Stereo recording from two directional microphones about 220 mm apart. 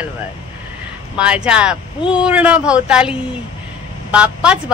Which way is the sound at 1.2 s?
5° right (ahead or behind).